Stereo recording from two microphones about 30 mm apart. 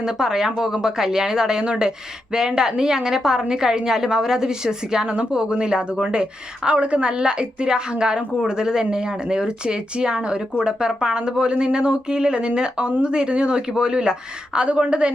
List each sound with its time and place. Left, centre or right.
0.2 s speech: centre
6.7 s speech: right